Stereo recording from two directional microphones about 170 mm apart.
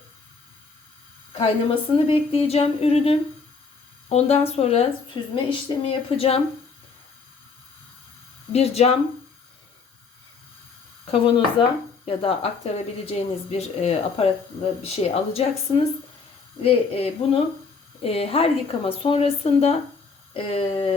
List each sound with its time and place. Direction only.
1.3 s a woman's voice: 35° left (ahead or behind)
8.5 s a woman's voice: 40° left (ahead or behind)
11.0 s a woman's voice: 30° left (ahead or behind)